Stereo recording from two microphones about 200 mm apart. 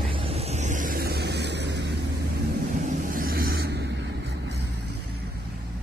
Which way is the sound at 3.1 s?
45° right (ahead or behind).